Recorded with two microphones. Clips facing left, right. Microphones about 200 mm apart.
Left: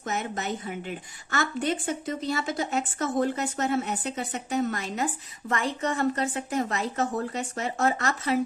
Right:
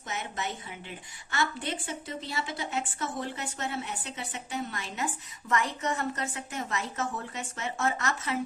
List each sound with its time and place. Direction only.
0.0 s a woman's voice: 45° left (ahead or behind)